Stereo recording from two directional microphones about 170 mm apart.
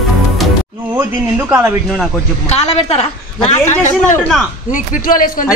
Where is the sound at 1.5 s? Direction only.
10° right (ahead or behind).